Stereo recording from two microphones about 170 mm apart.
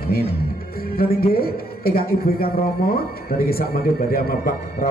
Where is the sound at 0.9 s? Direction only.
60° left (ahead or behind).